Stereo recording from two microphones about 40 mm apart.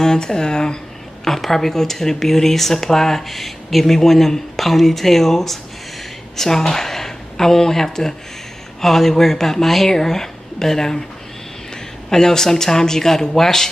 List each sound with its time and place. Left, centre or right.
0.0 s speech: centre
1.2 s speech: centre